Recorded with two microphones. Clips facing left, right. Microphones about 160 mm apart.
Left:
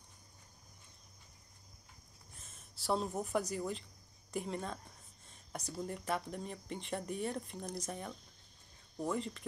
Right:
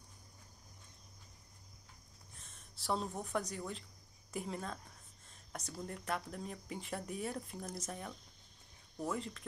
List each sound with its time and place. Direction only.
2.3 s a woman's voice: 5° left (ahead or behind)